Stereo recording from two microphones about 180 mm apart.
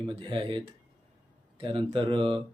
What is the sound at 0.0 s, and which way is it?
Speech, 25° right (ahead or behind).